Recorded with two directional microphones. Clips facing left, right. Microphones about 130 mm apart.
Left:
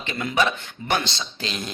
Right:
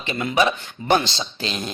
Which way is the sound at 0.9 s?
25° right (ahead or behind).